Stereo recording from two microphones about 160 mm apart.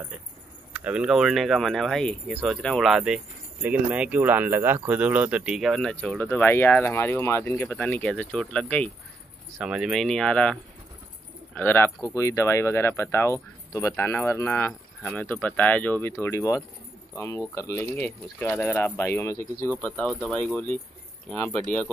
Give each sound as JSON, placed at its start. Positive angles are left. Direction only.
{"t": 0.7, "sound": "speech", "side_deg": -5}
{"t": 9.6, "sound": "speech", "side_deg": -5}
{"t": 19.8, "sound": "speech", "side_deg": 5}